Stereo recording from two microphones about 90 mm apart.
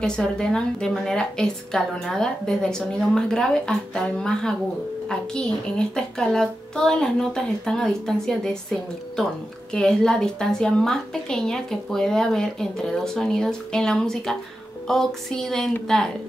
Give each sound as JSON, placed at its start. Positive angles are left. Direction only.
{"t": 0.0, "sound": "a woman's voice", "side_deg": 10}
{"t": 9.7, "sound": "a woman's voice", "side_deg": 10}